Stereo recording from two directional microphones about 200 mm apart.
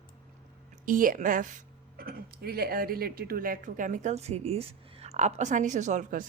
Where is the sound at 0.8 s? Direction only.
45° right (ahead or behind).